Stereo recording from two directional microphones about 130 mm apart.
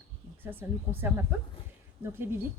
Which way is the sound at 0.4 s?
15° right (ahead or behind).